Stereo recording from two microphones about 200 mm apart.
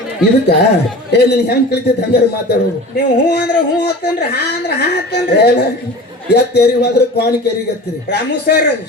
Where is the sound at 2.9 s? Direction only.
55° left (ahead or behind).